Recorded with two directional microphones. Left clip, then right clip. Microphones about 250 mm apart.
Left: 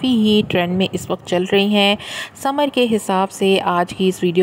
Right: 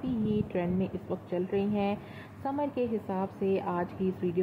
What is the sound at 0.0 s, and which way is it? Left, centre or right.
Speech, left.